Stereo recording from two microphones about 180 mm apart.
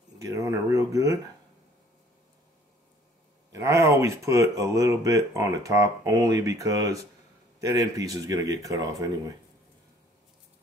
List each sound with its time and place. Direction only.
0.2 s speech: 20° right (ahead or behind)
3.6 s speech: 15° right (ahead or behind)